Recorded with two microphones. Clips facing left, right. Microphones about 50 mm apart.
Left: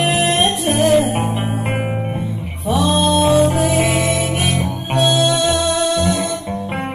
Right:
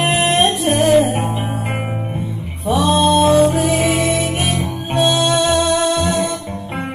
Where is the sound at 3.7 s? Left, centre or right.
Left.